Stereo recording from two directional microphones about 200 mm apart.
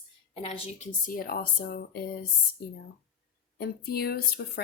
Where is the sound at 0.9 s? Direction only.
45° left (ahead or behind).